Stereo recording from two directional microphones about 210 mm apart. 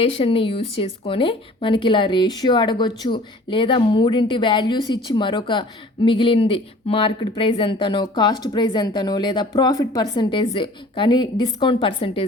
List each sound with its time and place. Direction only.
0.0 s speech: 25° left (ahead or behind)